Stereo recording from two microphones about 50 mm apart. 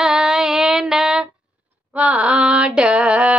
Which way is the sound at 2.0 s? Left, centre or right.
Right.